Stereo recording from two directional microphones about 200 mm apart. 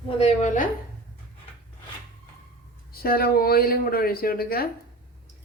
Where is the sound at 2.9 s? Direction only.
50° left (ahead or behind).